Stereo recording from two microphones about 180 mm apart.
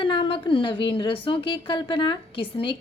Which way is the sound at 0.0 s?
30° left (ahead or behind).